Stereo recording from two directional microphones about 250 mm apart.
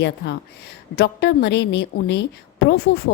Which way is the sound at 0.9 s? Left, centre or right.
Left.